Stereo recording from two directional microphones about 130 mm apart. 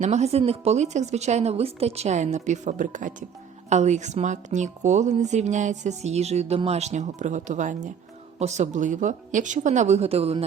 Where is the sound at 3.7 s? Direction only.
60° right (ahead or behind).